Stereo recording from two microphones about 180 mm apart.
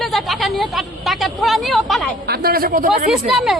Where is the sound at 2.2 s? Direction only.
60° right (ahead or behind).